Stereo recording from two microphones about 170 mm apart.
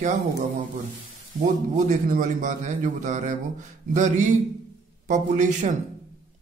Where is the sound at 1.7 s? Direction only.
50° right (ahead or behind).